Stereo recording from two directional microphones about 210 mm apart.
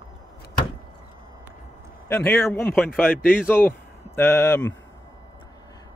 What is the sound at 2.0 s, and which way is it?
A man's voice, 10° left (ahead or behind).